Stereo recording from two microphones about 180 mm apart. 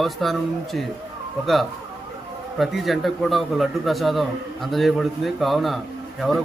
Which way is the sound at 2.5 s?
Centre (ahead or behind).